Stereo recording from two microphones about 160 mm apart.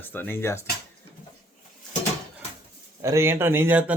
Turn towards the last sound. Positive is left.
turn(degrees=-10)  # may be behind; listen again after turning